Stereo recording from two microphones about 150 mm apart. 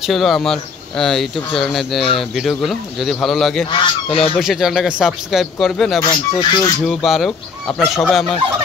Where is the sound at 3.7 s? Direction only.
35° left (ahead or behind).